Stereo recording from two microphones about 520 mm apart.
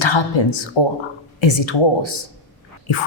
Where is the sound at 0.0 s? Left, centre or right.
Left.